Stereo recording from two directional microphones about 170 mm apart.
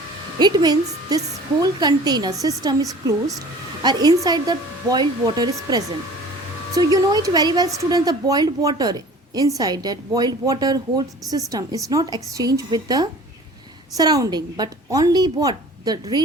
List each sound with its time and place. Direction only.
0.3 s speech: 25° right (ahead or behind)